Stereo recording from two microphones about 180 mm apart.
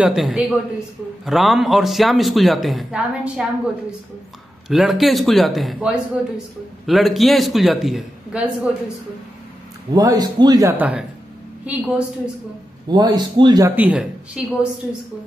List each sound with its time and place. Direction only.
0.0 s a man's voice: centre (ahead or behind)
4.6 s a man's voice: centre (ahead or behind)
9.9 s speech: 20° right (ahead or behind)
10.8 s speech: 10° right (ahead or behind)
12.9 s speech: 25° right (ahead or behind)
13.7 s a man's voice: 5° right (ahead or behind)